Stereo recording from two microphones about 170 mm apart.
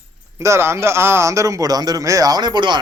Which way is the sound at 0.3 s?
15° right (ahead or behind).